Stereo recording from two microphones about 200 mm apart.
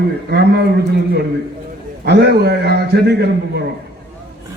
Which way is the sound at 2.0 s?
55° right (ahead or behind).